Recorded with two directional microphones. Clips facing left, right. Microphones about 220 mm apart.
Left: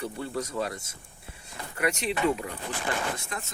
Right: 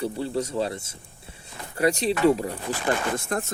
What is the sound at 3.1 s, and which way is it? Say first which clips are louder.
Speech: right 10 dB; 55° right (ahead or behind).